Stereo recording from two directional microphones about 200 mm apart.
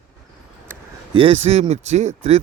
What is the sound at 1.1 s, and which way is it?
Speech, 25° right (ahead or behind).